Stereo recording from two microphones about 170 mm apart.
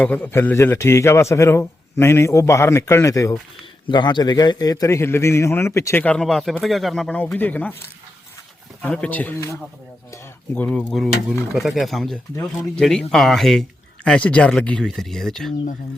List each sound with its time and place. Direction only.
0.0 s a man's voice: 10° left (ahead or behind)
8.8 s a man's voice: 5° left (ahead or behind)